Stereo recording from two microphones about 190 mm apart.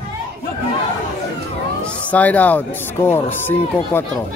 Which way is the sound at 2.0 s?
10° left (ahead or behind).